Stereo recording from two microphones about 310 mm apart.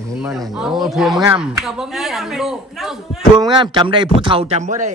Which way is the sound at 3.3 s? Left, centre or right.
Centre.